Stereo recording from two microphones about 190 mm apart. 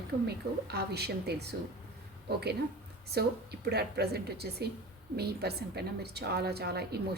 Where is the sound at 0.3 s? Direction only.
55° right (ahead or behind).